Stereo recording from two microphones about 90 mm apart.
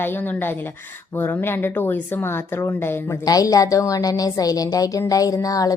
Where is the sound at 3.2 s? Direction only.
40° left (ahead or behind).